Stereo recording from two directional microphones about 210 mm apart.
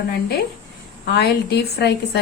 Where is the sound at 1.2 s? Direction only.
50° left (ahead or behind).